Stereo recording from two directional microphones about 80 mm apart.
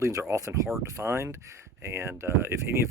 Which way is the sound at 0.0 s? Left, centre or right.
Right.